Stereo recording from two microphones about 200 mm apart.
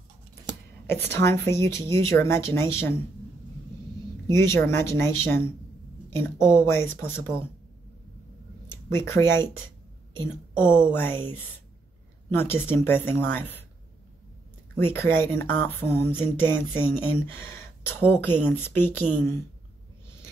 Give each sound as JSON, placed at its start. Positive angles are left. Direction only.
{"t": 0.5, "sound": "a sound", "side_deg": -20}
{"t": 0.8, "sound": "speech", "side_deg": 10}
{"t": 4.3, "sound": "speech", "side_deg": 15}
{"t": 8.8, "sound": "speech", "side_deg": 10}
{"t": 10.6, "sound": "speech", "side_deg": 10}
{"t": 14.8, "sound": "speech", "side_deg": 10}